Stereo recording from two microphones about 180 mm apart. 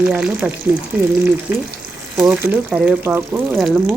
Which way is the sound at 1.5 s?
10° right (ahead or behind).